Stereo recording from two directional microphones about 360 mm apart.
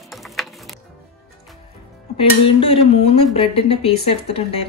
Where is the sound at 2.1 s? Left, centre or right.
Centre.